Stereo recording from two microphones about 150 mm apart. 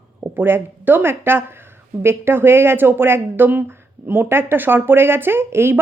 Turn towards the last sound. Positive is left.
turn(degrees=-15)  # may be behind; listen again after turning